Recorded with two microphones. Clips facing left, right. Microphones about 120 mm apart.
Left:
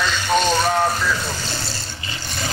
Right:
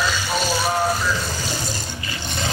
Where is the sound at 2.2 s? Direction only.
20° right (ahead or behind).